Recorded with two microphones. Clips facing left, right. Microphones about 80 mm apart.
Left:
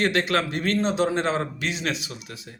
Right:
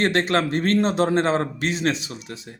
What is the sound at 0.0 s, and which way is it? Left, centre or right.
Speech, right.